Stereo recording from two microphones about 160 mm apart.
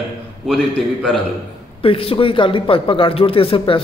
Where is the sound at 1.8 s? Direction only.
35° left (ahead or behind).